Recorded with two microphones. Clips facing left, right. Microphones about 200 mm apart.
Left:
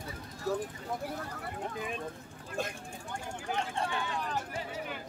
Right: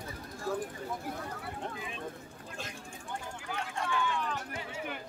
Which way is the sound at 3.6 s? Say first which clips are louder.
Right 1 dB; 35° left (ahead or behind).